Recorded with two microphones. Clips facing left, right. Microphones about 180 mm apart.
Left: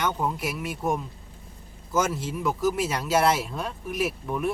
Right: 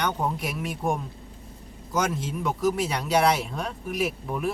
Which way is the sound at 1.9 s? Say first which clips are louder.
Left 1 dB; 5° left (ahead or behind).